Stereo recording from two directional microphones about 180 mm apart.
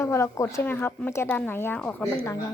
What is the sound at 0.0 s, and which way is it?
Speech, 15° left (ahead or behind).